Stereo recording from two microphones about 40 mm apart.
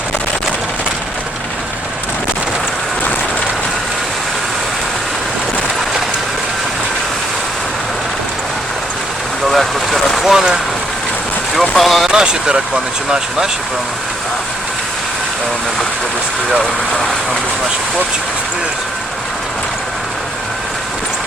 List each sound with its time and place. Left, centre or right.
9.5 s vehicle: centre
10.2 s rain on surface: centre
11.7 s vehicle: centre
12.1 s speech: right